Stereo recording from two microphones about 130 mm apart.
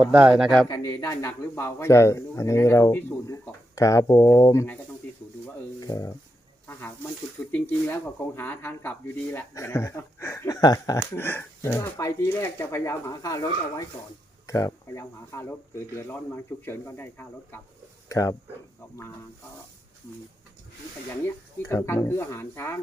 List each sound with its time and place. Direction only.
0.0 s speech: 10° right (ahead or behind)
0.7 s speech: 25° left (ahead or behind)
5.8 s speech: 25° left (ahead or behind)
7.4 s speech: 20° left (ahead or behind)
21.2 s speech: 20° left (ahead or behind)